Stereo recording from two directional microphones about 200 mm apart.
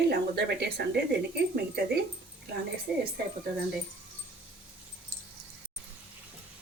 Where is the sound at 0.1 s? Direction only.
55° right (ahead or behind).